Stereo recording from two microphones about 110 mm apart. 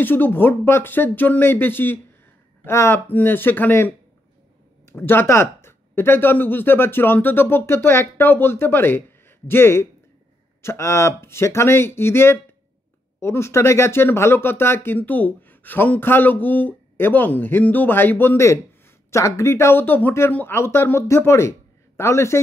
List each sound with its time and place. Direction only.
0.0 s speech: 20° left (ahead or behind)